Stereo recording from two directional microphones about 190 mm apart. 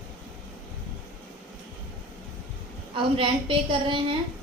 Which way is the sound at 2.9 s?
25° right (ahead or behind).